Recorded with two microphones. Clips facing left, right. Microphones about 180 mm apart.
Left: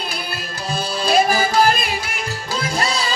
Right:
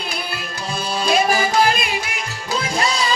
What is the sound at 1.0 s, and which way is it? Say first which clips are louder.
Music: left 1 dB; 35° left (ahead or behind).